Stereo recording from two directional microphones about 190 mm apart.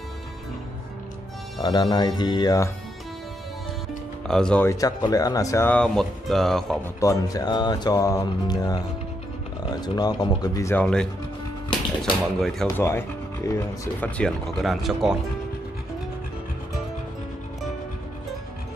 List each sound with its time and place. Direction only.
1.6 s music: 25° left (ahead or behind)
4.3 s speech: 5° left (ahead or behind)
4.6 s speech: 20° left (ahead or behind); by 6.9 s centre (ahead or behind)
7.0 s music: 15° left (ahead or behind)
12.0 s speech: centre (ahead or behind)
12.6 s speech: 15° left (ahead or behind)